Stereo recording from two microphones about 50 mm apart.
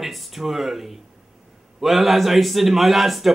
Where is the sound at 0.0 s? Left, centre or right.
Centre.